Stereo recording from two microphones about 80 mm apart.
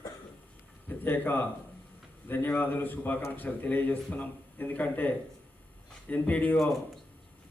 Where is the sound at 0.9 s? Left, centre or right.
Left.